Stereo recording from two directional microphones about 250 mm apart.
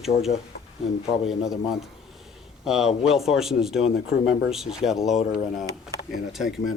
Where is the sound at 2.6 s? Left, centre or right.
Centre.